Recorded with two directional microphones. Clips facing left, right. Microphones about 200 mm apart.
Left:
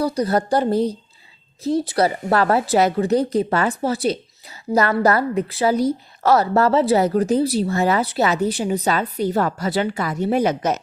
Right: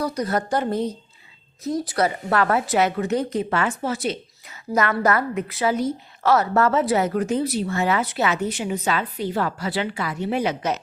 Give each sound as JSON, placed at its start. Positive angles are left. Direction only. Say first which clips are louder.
{"t": 0.0, "sound": "a woman's voice", "louder": "left 4 dB", "side_deg": 30}